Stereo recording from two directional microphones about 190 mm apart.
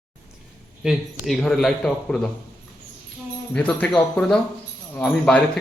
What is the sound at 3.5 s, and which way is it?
A man's voice, 5° left (ahead or behind).